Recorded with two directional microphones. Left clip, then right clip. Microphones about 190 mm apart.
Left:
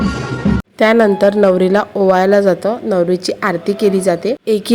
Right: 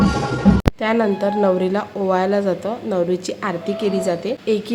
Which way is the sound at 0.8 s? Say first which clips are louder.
Left 14 dB; 40° left (ahead or behind).